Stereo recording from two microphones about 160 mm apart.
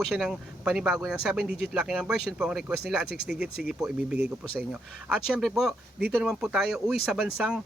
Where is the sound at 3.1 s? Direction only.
90° right.